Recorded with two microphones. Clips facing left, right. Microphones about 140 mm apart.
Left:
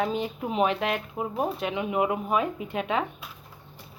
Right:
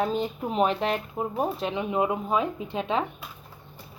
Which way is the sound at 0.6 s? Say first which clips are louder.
Right 1 dB; 35° right (ahead or behind).